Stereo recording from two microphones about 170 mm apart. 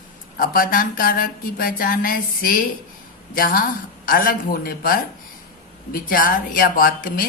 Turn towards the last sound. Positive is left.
turn(degrees=60)  # may be behind; listen again after turning